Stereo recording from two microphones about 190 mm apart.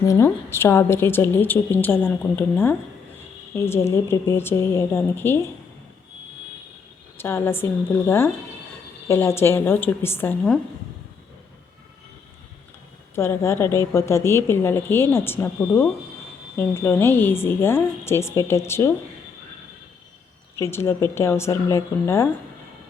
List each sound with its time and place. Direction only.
0.0 s a woman's voice: 15° left (ahead or behind)
7.2 s a woman's voice: 10° left (ahead or behind)
13.1 s a woman's voice: 15° left (ahead or behind)
20.6 s a woman's voice: 15° left (ahead or behind)